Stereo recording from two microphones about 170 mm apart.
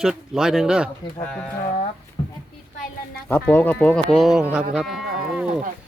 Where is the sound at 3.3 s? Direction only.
10° left (ahead or behind).